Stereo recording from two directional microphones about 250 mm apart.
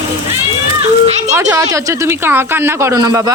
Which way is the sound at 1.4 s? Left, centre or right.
Centre.